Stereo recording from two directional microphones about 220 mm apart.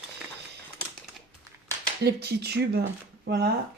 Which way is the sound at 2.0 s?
45° right (ahead or behind).